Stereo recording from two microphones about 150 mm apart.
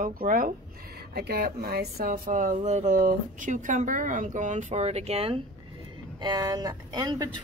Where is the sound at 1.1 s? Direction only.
90° right; by 5.4 s 40° right (ahead or behind).